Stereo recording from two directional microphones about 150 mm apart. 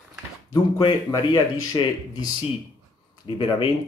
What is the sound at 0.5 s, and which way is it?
Speech, 25° left (ahead or behind).